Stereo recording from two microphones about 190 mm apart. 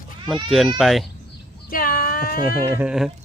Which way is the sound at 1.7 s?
50° left (ahead or behind).